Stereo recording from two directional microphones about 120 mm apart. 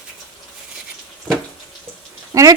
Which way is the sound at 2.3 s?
25° right (ahead or behind).